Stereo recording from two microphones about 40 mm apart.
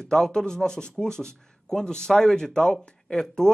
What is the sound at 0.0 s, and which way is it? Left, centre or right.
A man's voice, centre.